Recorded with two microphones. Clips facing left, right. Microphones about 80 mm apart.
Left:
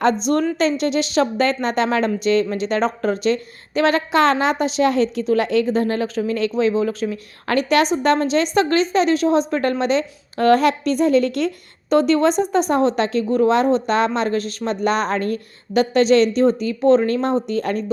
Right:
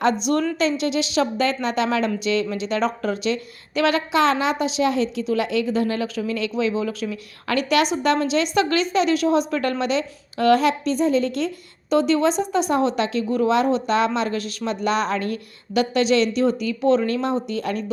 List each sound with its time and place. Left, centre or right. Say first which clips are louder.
0.0 s a woman's voice: left 2 dB; left